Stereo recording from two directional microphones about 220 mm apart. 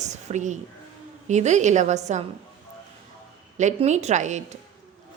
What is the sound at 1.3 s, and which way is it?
Speech, 30° right (ahead or behind).